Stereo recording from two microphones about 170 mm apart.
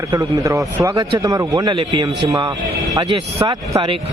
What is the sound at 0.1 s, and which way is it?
Speech, 20° right (ahead or behind).